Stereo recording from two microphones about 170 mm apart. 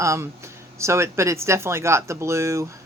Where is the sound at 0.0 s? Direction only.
15° right (ahead or behind).